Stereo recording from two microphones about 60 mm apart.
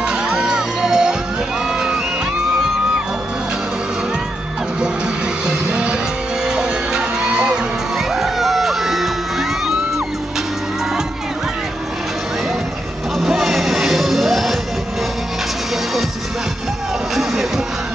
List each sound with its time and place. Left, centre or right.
0.0 s music: centre
5.5 s music: centre
8.1 s music: centre
13.2 s music: centre
17.1 s music: centre